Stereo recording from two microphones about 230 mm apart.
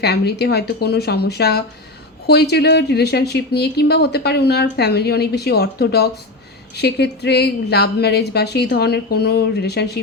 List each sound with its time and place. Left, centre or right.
0.0 s speech: left